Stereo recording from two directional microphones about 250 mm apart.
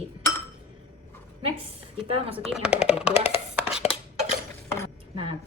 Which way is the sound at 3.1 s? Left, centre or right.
Left.